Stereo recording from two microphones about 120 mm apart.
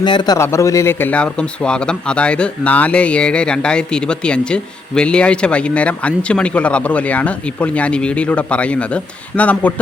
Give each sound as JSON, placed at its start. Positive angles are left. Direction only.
{"t": 0.0, "sound": "a man's voice", "side_deg": 40}
{"t": 0.3, "sound": "speech", "side_deg": 25}